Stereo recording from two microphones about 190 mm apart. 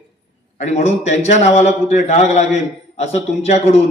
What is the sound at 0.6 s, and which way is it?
A man's voice, 35° left (ahead or behind).